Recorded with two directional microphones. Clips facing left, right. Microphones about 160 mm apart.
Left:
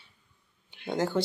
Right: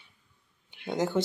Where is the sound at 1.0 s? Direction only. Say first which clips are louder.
Even; 20° right (ahead or behind).